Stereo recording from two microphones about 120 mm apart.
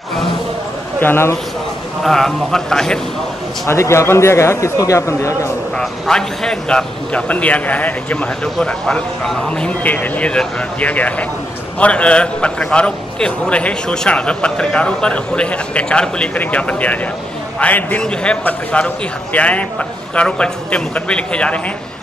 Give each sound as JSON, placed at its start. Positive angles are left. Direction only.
{"t": 1.0, "sound": "a man's voice", "side_deg": 20}
{"t": 2.0, "sound": "a man's voice", "side_deg": 5}
{"t": 3.6, "sound": "a man's voice", "side_deg": 25}
{"t": 5.8, "sound": "a man's voice", "side_deg": 5}